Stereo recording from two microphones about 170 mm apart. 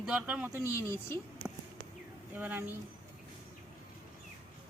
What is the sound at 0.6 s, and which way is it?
Speech, 15° left (ahead or behind).